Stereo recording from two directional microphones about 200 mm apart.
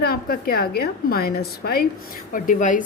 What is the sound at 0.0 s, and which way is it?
A woman's voice, 50° left (ahead or behind).